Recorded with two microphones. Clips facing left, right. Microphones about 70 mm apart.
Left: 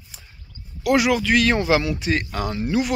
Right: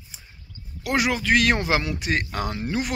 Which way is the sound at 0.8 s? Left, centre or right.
Right.